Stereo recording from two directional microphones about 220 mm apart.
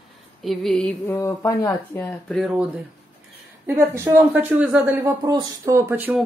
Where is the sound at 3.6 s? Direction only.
10° right (ahead or behind).